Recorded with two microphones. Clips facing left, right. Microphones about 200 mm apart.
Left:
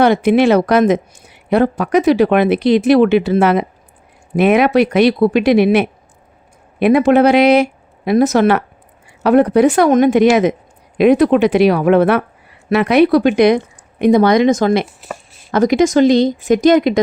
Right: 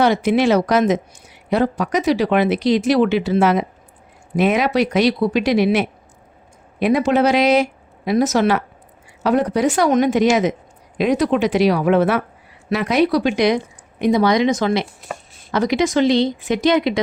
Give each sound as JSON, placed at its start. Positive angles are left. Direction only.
{"t": 0.0, "sound": "speech", "side_deg": 55}